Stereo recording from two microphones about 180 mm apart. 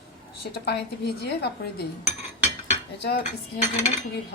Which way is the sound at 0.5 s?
65° left (ahead or behind).